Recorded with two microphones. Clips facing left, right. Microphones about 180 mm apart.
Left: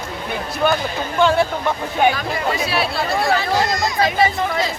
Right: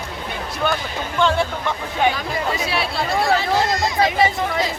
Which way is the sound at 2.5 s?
20° right (ahead or behind).